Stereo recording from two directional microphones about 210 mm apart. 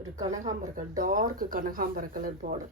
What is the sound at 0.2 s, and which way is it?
Speech, 15° right (ahead or behind).